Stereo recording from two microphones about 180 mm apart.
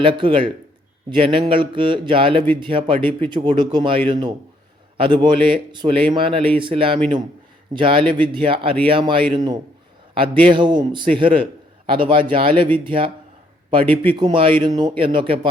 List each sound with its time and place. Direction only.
0.0 s speech: 30° right (ahead or behind)
14.1 s speech: 30° right (ahead or behind)